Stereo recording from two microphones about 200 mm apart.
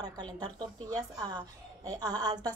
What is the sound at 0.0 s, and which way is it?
A woman's voice, 20° right (ahead or behind).